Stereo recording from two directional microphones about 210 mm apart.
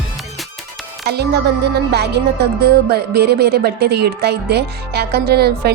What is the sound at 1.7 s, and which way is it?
A woman's voice, 50° right (ahead or behind).